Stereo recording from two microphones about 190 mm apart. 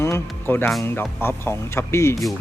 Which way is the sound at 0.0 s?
15° left (ahead or behind).